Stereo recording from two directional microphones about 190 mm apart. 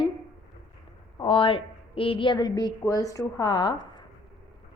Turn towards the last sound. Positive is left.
turn(degrees=20)  # may be behind; listen again after turning